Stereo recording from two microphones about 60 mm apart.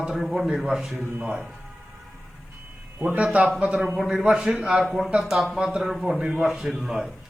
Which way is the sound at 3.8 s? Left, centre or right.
Centre.